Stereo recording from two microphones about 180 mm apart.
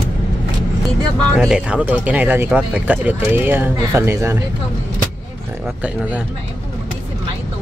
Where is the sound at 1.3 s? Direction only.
5° right (ahead or behind).